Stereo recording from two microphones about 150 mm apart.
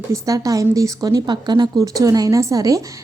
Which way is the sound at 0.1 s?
20° right (ahead or behind).